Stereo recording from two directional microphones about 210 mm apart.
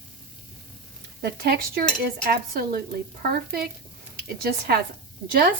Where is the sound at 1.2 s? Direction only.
50° right (ahead or behind).